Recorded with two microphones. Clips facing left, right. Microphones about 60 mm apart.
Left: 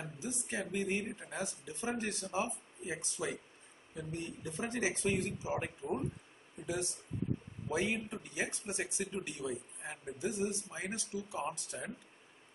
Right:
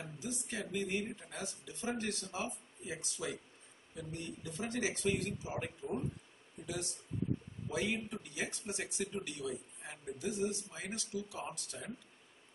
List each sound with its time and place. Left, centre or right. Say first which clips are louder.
0.0 s speech: left 1 dB; left